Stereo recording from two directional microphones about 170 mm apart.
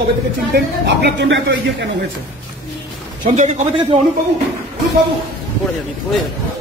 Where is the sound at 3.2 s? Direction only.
40° right (ahead or behind).